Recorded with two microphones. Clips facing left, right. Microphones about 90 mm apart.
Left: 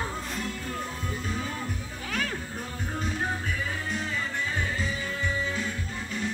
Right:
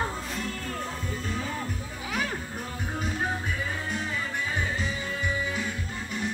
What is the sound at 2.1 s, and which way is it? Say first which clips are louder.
Music: right 1 dB; 15° right (ahead or behind).